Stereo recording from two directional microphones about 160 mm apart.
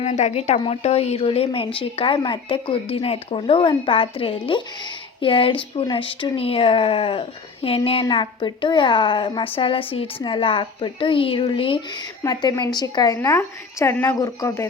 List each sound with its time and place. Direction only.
0.0 s a woman's voice: 45° left (ahead or behind); by 14.7 s 20° left (ahead or behind)